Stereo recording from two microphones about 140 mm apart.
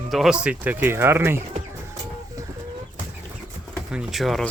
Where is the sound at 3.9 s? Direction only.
5° right (ahead or behind).